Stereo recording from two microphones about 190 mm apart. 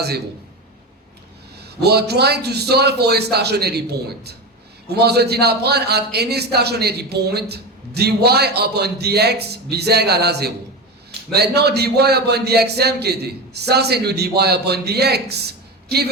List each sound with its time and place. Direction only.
1.5 s a man's voice: 60° right (ahead or behind)